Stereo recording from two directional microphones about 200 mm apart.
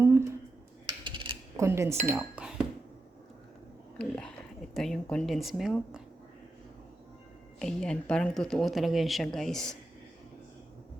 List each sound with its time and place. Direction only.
0.0 s a sound: 15° right (ahead or behind)
1.0 s typing: 25° right (ahead or behind)
1.6 s speech: 15° right (ahead or behind)
2.0 s speech: centre (ahead or behind)
3.9 s speech: 5° left (ahead or behind)
7.6 s speech: 5° left (ahead or behind)